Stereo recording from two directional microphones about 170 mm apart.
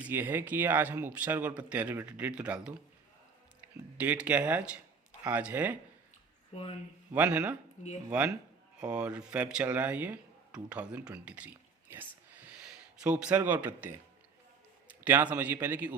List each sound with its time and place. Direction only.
0.0 s speech: 10° right (ahead or behind)
6.5 s speech: 35° left (ahead or behind)
7.1 s speech: 10° right (ahead or behind)
7.8 s speech: 45° left (ahead or behind)
8.8 s speech: 5° right (ahead or behind)
15.0 s speech: 10° right (ahead or behind)